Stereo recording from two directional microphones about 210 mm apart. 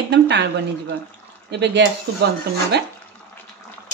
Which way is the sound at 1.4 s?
55° right (ahead or behind).